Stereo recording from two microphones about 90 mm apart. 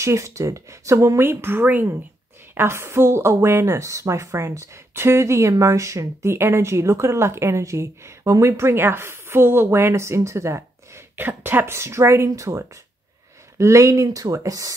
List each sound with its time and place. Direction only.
0.0 s a woman's voice: 35° right (ahead or behind)
11.1 s a woman's voice: 20° right (ahead or behind); by 14.7 s 40° right (ahead or behind)